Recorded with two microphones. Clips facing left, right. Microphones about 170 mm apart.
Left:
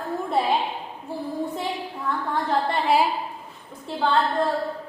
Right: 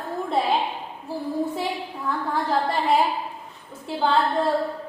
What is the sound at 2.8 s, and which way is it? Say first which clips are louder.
Speech: even; centre (ahead or behind).